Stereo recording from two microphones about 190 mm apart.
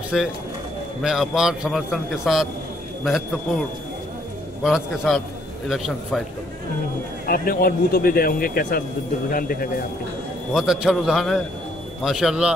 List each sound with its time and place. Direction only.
0.1 s a man's voice: centre (ahead or behind)
4.6 s a man's voice: 5° right (ahead or behind)
7.2 s speech: 50° left (ahead or behind)
10.5 s a man's voice: 5° right (ahead or behind)